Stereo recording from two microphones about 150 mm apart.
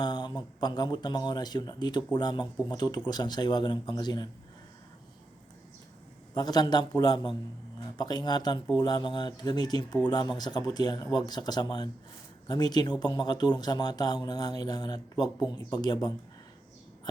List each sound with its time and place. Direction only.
0.0 s speech: 30° left (ahead or behind)
6.3 s speech: 25° left (ahead or behind)